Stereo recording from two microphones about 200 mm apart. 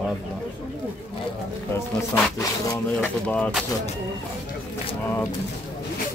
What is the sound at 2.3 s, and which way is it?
Speech, 15° left (ahead or behind).